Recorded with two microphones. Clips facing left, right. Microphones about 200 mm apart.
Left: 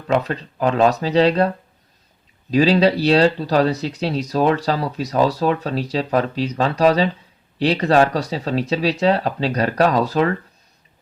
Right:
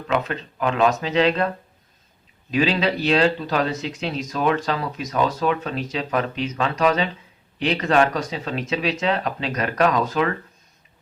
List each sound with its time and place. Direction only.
0.1 s speech: 35° left (ahead or behind)
2.5 s speech: 35° left (ahead or behind)